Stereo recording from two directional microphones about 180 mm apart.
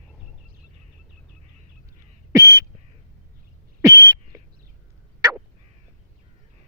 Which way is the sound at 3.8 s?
20° right (ahead or behind).